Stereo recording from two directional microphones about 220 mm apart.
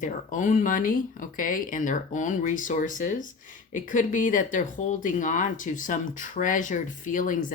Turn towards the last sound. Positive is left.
turn(degrees=35)  # may be behind; listen again after turning